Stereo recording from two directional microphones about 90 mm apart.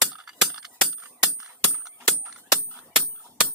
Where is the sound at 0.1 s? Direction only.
15° right (ahead or behind).